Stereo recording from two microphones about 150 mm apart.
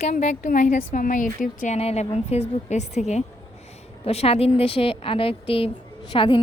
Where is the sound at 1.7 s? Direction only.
45° left (ahead or behind).